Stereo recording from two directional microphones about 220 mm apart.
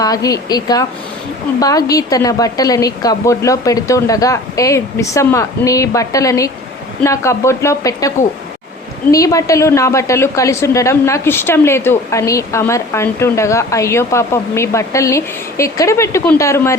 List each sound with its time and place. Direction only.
0.0 s a woman's voice: 15° left (ahead or behind)
9.1 s a woman's voice: 15° left (ahead or behind)